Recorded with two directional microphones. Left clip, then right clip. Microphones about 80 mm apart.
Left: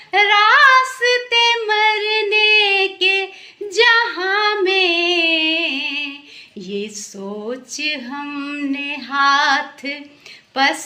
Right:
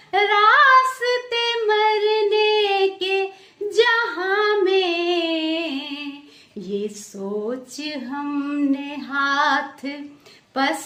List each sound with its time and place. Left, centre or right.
0.1 s female singing: right
7.7 s speech: right
8.4 s female singing: right
10.5 s a woman's voice: right